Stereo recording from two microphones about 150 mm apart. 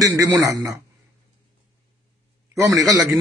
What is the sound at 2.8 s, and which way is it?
Speech, 25° right (ahead or behind).